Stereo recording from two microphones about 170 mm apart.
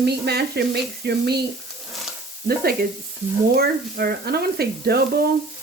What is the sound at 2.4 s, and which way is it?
Speech, 65° right (ahead or behind).